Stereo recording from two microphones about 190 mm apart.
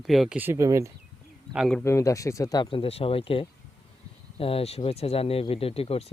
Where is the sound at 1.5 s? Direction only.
Centre (ahead or behind).